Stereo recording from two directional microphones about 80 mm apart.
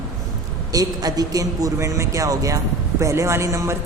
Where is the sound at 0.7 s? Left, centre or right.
Right.